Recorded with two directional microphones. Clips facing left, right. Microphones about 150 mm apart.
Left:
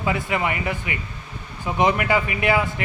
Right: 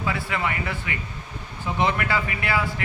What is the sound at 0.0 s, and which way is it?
A man's voice, 20° left (ahead or behind).